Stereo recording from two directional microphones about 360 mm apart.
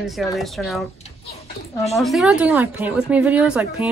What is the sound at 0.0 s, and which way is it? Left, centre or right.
Speech, centre.